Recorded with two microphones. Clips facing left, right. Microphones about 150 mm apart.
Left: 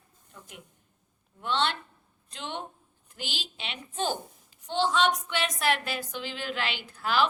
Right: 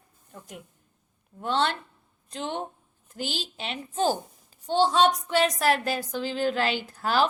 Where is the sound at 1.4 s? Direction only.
40° right (ahead or behind).